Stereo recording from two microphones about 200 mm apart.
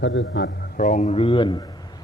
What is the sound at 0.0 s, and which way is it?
Speech, 70° left (ahead or behind).